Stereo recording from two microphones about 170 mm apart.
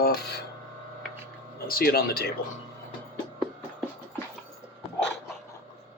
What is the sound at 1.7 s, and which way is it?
Speech, 60° left (ahead or behind).